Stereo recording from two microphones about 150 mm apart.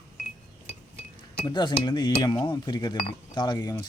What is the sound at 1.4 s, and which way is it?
Speech, 30° left (ahead or behind).